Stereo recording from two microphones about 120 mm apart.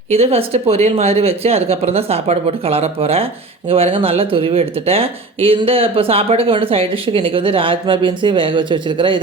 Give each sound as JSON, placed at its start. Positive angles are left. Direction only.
{"t": 0.1, "sound": "a woman's voice", "side_deg": -55}